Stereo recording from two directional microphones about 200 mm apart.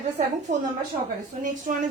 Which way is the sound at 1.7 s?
45° right (ahead or behind).